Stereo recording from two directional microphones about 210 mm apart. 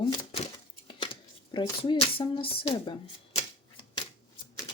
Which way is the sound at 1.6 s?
20° left (ahead or behind).